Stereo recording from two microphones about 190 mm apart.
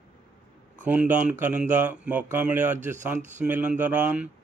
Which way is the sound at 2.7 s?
40° right (ahead or behind).